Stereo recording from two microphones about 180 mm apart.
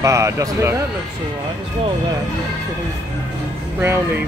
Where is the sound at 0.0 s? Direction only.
15° right (ahead or behind).